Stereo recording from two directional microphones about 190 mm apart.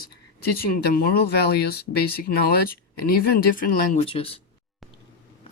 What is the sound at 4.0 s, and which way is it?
Speech, 30° left (ahead or behind).